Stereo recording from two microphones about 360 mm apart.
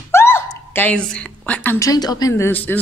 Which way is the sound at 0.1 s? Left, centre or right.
Centre.